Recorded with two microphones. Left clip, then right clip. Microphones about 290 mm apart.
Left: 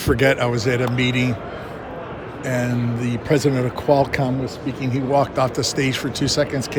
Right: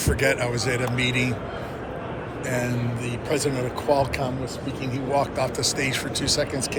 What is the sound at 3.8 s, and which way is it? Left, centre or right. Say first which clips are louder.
Speech: left 5 dB; left.